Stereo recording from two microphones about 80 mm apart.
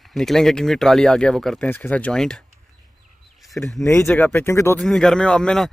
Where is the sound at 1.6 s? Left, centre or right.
Centre.